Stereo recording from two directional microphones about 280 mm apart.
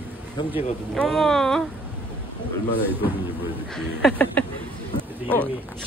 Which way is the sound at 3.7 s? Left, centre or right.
Centre.